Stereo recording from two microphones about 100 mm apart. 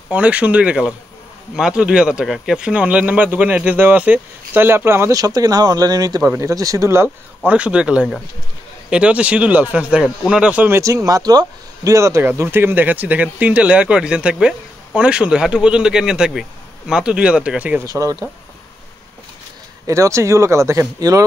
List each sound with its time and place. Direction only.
0.1 s speech: 15° right (ahead or behind)
5.1 s speech: 40° right (ahead or behind)
6.2 s speech: 30° right (ahead or behind)
7.4 s speech: 10° right (ahead or behind)
10.8 s speech: 35° right (ahead or behind); by 17.8 s 15° right (ahead or behind)
17.8 s speech: 35° right (ahead or behind)
19.9 s speech: 30° right (ahead or behind)